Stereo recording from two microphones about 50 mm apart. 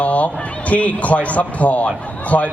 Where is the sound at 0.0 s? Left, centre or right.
Left.